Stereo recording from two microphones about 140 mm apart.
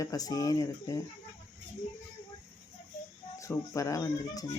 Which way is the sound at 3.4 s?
25° left (ahead or behind).